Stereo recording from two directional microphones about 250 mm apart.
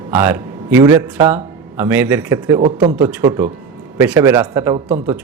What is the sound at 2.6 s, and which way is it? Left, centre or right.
Speech, right.